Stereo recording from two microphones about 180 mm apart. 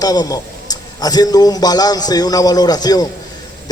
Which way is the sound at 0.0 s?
20° left (ahead or behind).